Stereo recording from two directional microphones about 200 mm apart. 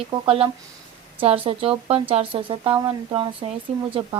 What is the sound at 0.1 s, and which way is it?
Speech, 25° right (ahead or behind).